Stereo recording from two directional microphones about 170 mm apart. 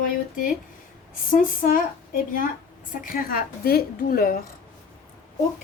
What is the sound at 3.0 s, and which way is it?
A woman's voice, 60° left (ahead or behind).